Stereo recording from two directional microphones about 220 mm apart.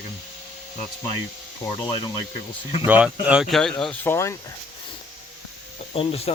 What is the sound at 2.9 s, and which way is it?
Speech, 5° right (ahead or behind).